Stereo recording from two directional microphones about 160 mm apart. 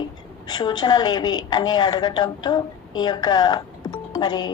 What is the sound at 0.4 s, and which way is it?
A woman's voice, 25° left (ahead or behind).